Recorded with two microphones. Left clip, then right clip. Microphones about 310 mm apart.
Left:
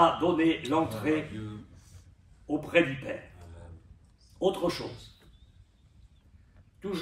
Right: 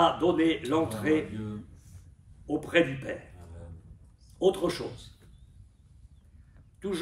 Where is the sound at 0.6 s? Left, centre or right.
Right.